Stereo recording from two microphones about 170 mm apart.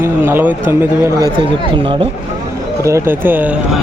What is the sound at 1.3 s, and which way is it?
Speech, 30° right (ahead or behind).